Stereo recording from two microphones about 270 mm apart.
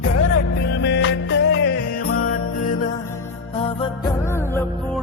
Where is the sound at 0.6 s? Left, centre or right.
Left.